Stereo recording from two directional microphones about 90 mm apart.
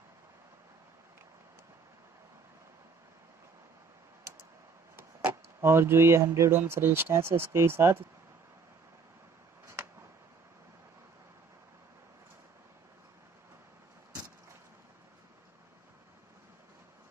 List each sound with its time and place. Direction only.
5.6 s speech: 30° right (ahead or behind)